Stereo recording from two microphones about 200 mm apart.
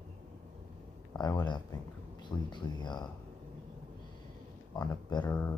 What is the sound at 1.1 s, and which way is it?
Speech, 20° left (ahead or behind).